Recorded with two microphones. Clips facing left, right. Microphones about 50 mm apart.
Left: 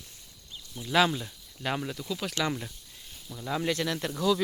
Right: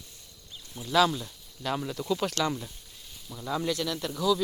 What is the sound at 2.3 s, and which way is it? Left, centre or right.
Speech, centre.